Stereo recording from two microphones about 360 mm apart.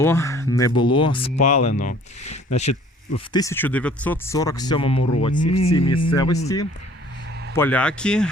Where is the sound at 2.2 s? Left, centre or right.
Left.